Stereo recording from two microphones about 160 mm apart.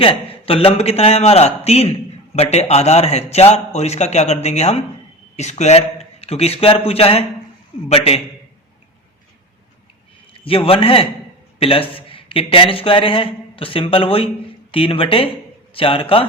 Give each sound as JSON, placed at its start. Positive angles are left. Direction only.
{"t": 0.0, "sound": "a man's voice", "side_deg": 35}
{"t": 10.3, "sound": "a man's voice", "side_deg": 35}